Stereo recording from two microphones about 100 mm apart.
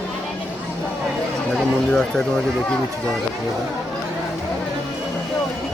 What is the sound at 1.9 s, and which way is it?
Speech, 5° left (ahead or behind).